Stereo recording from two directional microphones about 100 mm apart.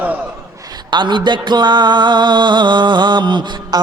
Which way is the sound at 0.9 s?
50° right (ahead or behind).